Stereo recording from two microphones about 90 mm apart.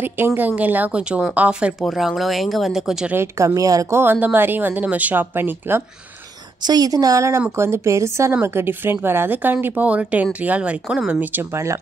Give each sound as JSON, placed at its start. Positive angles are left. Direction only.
{"t": 0.0, "sound": "speech", "side_deg": -25}
{"t": 1.8, "sound": "speech", "side_deg": 0}
{"t": 3.3, "sound": "a woman's voice", "side_deg": -35}
{"t": 3.9, "sound": "speech", "side_deg": -25}
{"t": 6.6, "sound": "a woman's voice", "side_deg": -45}
{"t": 11.5, "sound": "a woman's voice", "side_deg": -35}